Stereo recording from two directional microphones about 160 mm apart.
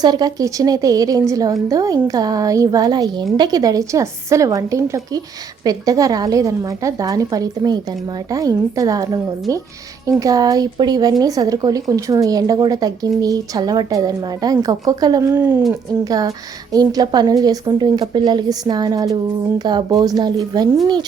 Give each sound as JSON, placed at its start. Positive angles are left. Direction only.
{"t": 0.0, "sound": "speech", "side_deg": -25}